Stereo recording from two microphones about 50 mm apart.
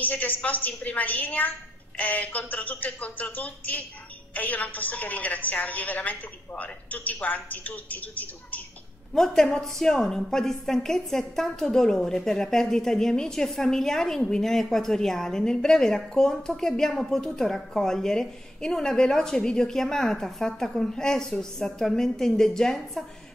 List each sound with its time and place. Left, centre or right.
0.0 s a woman's voice: left
9.1 s a woman's voice: centre